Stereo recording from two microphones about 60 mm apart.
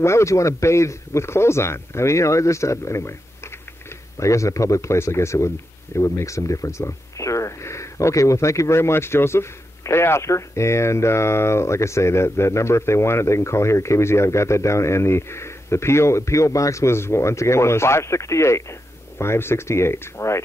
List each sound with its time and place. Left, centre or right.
0.0 s speech: left
4.2 s speech: left
4.9 s speech: left